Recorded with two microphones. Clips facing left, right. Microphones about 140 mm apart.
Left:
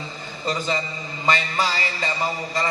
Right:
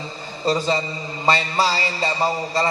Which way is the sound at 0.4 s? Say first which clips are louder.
Right 5 dB; 30° right (ahead or behind).